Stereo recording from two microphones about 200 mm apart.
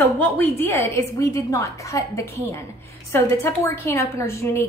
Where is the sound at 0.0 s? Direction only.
10° left (ahead or behind).